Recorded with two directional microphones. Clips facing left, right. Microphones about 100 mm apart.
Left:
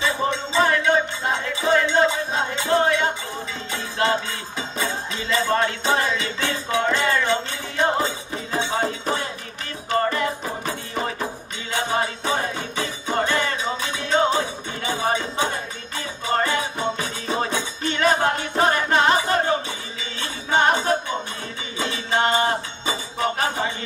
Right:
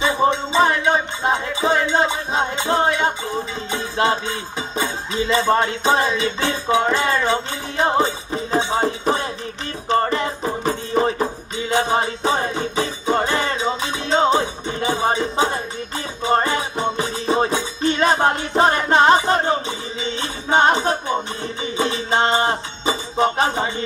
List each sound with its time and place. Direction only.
0.0 s music: 20° right (ahead or behind)
11.7 s music: 25° right (ahead or behind)